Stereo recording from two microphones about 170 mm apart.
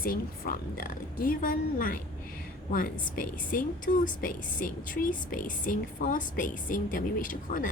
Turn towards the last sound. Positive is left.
turn(degrees=50)  # may be behind; listen again after turning